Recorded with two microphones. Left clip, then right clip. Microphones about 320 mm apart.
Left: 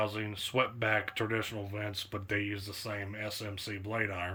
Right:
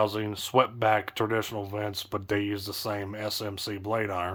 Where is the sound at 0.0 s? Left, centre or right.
Centre.